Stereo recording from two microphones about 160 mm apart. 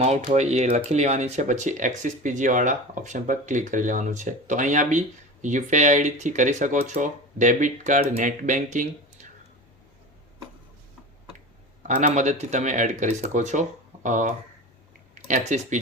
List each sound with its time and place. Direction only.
0.0 s speech: 45° right (ahead or behind)
11.9 s speech: 50° right (ahead or behind)